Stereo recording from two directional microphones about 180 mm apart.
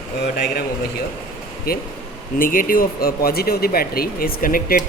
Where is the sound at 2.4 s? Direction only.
50° left (ahead or behind).